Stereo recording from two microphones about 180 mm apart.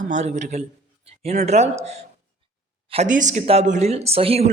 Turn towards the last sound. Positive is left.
turn(degrees=-35)  # may be behind; listen again after turning